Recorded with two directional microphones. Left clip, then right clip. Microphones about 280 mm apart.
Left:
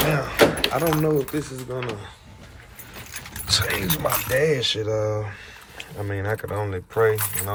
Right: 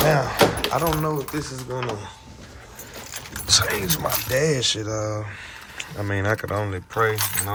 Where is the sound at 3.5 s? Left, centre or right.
Centre.